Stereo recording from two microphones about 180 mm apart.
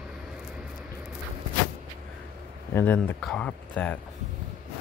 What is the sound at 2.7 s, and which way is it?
Speech, 15° left (ahead or behind).